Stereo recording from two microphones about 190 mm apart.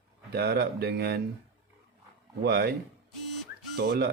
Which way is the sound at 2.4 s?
55° right (ahead or behind).